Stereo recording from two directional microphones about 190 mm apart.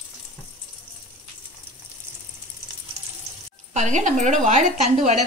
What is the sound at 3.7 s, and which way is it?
A woman's voice, 40° right (ahead or behind).